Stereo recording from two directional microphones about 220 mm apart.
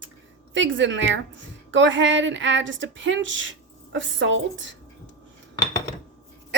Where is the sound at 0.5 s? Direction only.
55° right (ahead or behind).